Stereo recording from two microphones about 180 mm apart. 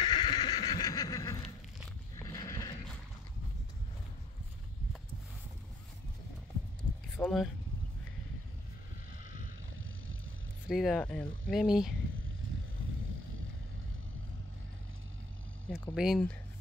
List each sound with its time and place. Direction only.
0.0 s neigh: 25° left (ahead or behind)
2.1 s horse: 15° left (ahead or behind)
7.2 s speech: 5° left (ahead or behind)
10.7 s speech: centre (ahead or behind)
15.9 s speech: centre (ahead or behind)